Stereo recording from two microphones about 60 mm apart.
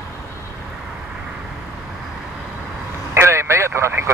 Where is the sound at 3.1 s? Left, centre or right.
Right.